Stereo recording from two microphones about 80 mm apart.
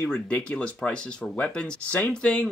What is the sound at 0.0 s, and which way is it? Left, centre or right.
Speech, centre.